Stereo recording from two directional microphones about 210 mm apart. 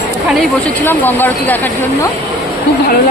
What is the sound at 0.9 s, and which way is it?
Speech, 10° left (ahead or behind).